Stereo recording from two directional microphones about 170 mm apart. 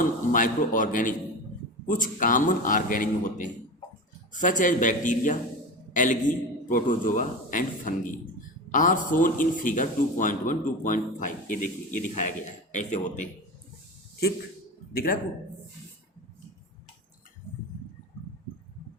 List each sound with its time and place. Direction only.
0.0 s a man's voice: 50° left (ahead or behind)
14.9 s speech: 60° left (ahead or behind)